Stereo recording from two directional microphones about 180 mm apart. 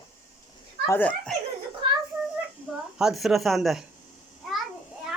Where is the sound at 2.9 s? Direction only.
Centre (ahead or behind).